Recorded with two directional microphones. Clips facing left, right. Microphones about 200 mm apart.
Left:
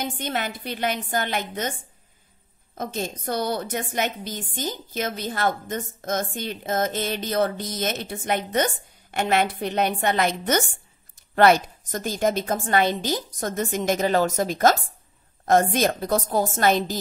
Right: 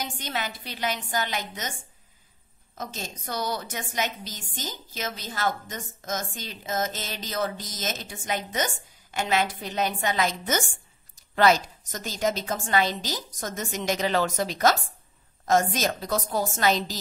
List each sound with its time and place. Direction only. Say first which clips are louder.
0.0 s a woman's voice: left 4 dB; 55° left (ahead or behind)
2.8 s a woman's voice: left 7 dB; 55° left (ahead or behind)